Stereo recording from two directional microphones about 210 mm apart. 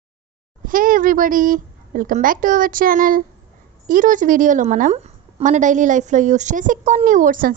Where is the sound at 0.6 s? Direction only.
40° right (ahead or behind).